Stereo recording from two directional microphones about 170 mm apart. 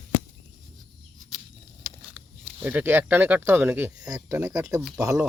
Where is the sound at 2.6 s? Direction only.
10° right (ahead or behind).